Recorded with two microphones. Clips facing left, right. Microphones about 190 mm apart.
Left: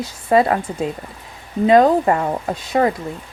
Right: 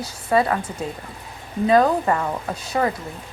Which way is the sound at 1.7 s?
25° left (ahead or behind).